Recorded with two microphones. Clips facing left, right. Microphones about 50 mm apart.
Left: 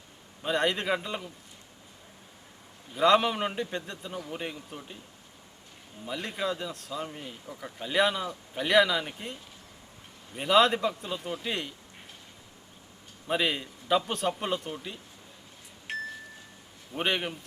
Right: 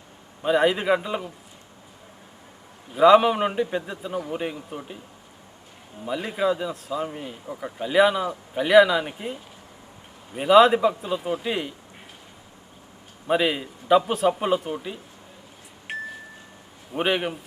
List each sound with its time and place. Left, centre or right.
0.4 s a man's voice: centre
2.9 s a man's voice: centre
6.1 s a man's voice: centre
7.4 s speech: right
7.8 s a man's voice: centre
13.2 s a man's voice: centre
15.9 s chime: right
16.9 s a man's voice: centre